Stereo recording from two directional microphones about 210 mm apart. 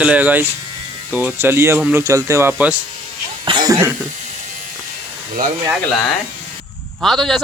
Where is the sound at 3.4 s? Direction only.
20° right (ahead or behind).